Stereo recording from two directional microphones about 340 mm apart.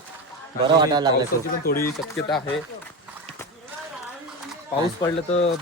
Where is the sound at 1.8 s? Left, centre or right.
Centre.